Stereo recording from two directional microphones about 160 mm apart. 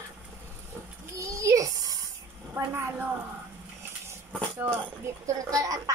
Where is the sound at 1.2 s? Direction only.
20° right (ahead or behind).